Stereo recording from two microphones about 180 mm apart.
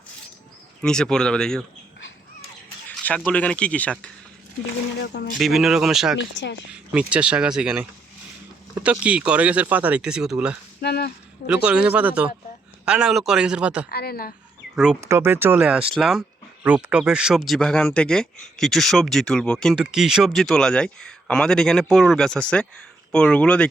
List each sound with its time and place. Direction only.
0.8 s speech: 5° left (ahead or behind)
2.9 s a sound: 10° left (ahead or behind)
3.2 s speech: 5° left (ahead or behind)
4.9 s speech: 70° left (ahead or behind)
5.4 s speech: centre (ahead or behind)
6.1 s a woman's voice: 85° left
6.7 s speech: 5° right (ahead or behind)
10.8 s a sound: 60° left (ahead or behind)
11.4 s speech: 5° right (ahead or behind)
13.9 s a woman's voice: 60° left (ahead or behind)
15.0 s speech: 15° right (ahead or behind); by 23.6 s 5° left (ahead or behind)